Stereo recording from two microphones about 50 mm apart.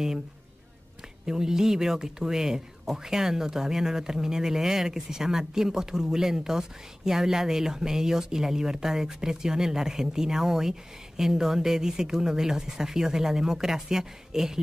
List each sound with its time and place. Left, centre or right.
1.2 s speech: centre